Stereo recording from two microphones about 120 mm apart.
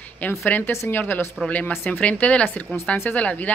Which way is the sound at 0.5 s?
15° left (ahead or behind).